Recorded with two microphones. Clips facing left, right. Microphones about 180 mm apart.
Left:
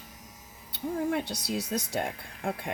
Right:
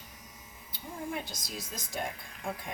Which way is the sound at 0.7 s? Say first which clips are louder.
Left 9 dB; 70° left (ahead or behind).